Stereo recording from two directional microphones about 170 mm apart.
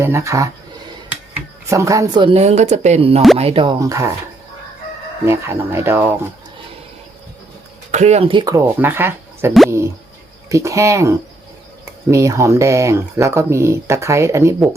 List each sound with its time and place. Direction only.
0.0 s speech: 15° right (ahead or behind)
1.7 s speech: 20° right (ahead or behind)
5.2 s speech: 15° right (ahead or behind)
7.9 s speech: 45° right (ahead or behind)
8.5 s speech: 15° right (ahead or behind)